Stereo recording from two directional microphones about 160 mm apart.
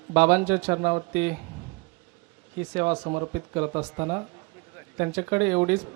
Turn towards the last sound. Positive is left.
turn(degrees=-10)  # may be behind; listen again after turning